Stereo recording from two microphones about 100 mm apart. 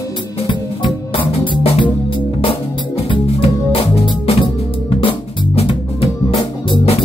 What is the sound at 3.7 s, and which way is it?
Music, 60° left (ahead or behind).